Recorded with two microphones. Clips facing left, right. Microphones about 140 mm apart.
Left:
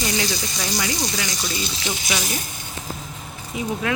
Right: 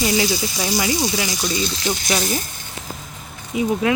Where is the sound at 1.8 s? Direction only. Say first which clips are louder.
Right 4 dB; 40° right (ahead or behind).